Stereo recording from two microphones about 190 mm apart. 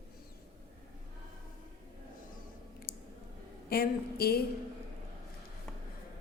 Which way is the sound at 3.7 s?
55° left (ahead or behind).